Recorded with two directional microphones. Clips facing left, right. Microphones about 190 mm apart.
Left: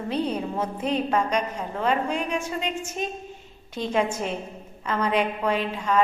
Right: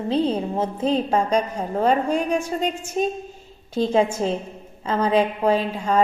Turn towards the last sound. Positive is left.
turn(degrees=-35)  # may be behind; listen again after turning